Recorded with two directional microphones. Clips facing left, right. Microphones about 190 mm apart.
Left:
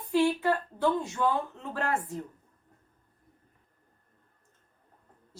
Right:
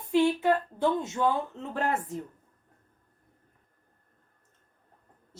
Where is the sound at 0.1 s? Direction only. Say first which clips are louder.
Right 2 dB; 20° right (ahead or behind).